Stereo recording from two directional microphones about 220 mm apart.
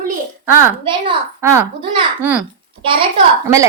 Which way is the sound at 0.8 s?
20° right (ahead or behind).